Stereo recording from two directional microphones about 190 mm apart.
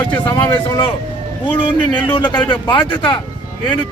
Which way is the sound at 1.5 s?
25° left (ahead or behind).